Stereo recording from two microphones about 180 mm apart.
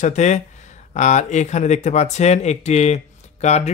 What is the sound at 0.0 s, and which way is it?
Speech, 40° left (ahead or behind).